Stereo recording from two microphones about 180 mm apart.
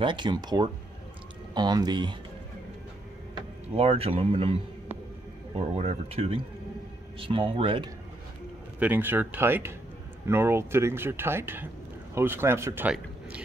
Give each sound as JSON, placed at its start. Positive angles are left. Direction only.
{"t": 0.0, "sound": "speech", "side_deg": -25}
{"t": 3.7, "sound": "speech", "side_deg": -30}
{"t": 8.7, "sound": "speech", "side_deg": -10}